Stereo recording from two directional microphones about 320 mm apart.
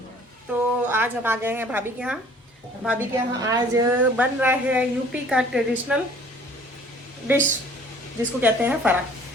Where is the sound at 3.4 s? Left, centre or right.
Centre.